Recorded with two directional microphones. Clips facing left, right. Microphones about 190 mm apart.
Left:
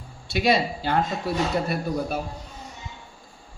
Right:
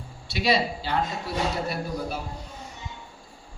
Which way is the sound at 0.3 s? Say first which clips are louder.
Left 2 dB; 50° left (ahead or behind).